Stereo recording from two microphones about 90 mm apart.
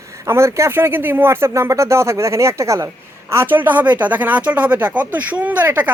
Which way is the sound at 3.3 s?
20° right (ahead or behind).